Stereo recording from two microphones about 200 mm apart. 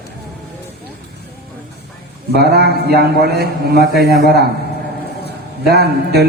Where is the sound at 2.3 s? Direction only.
50° right (ahead or behind).